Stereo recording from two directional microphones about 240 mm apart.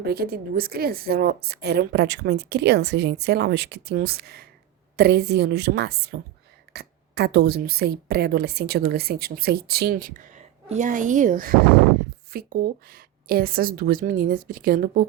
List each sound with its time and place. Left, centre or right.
0.1 s a woman's voice: right